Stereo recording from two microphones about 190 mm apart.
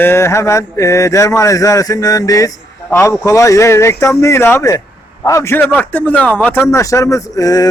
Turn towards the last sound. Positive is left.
turn(degrees=20)  # may be behind; listen again after turning